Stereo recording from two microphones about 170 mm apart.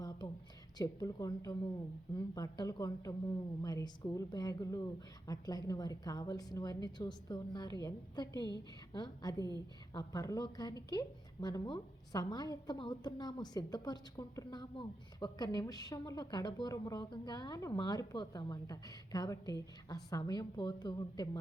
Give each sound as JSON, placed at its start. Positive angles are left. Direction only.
{"t": 0.8, "sound": "a woman's voice", "side_deg": 20}
{"t": 9.4, "sound": "a woman's voice", "side_deg": -25}
{"t": 9.9, "sound": "a woman's voice", "side_deg": 20}